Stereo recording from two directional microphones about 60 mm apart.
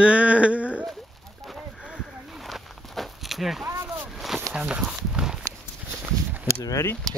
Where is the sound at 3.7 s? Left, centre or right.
Right.